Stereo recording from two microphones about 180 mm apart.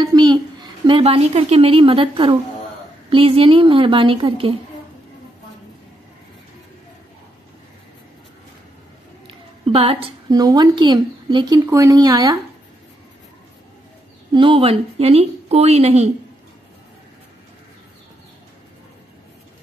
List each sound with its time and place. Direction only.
0.0 s a woman's voice: 25° right (ahead or behind)
9.3 s a sound: 30° right (ahead or behind)
10.3 s speech: 20° right (ahead or behind)
14.3 s a woman's voice: 30° right (ahead or behind)